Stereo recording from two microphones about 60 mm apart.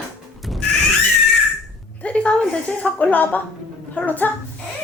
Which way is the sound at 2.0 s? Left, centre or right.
Centre.